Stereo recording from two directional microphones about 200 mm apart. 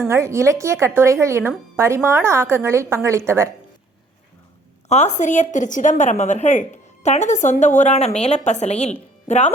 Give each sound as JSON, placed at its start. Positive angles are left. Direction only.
{"t": 0.1, "sound": "speech", "side_deg": -15}
{"t": 4.9, "sound": "a woman's voice", "side_deg": 35}